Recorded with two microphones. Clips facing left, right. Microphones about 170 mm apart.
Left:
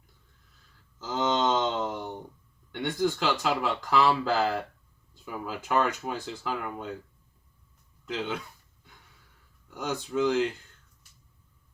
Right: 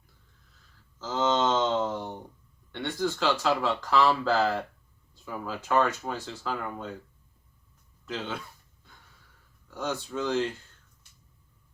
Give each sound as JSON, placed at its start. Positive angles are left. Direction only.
{"t": 0.9, "sound": "a sound", "side_deg": 15}
{"t": 2.7, "sound": "speech", "side_deg": 15}
{"t": 9.6, "sound": "speech", "side_deg": 15}